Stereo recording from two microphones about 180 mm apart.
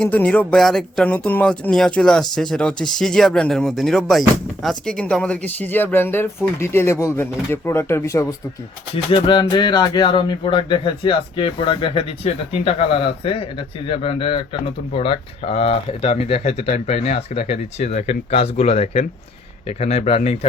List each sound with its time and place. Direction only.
0.0 s speech: 5° left (ahead or behind)
9.0 s speech: 25° left (ahead or behind)